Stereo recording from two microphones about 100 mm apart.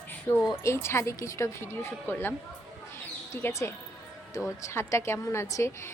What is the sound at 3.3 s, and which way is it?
Speech, 25° left (ahead or behind).